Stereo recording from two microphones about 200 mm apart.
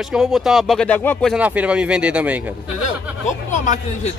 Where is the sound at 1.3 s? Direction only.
5° right (ahead or behind).